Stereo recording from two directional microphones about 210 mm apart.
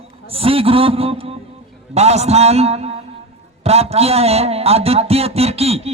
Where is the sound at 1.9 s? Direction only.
30° right (ahead or behind).